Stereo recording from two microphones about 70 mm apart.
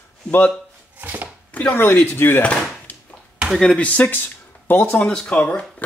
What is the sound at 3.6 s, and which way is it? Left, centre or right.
Speech, centre.